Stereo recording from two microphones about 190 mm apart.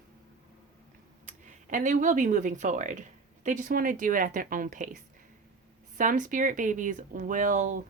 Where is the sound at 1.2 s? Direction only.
40° right (ahead or behind).